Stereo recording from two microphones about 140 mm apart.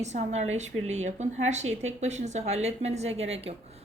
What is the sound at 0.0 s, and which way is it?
A woman's voice, 55° right (ahead or behind).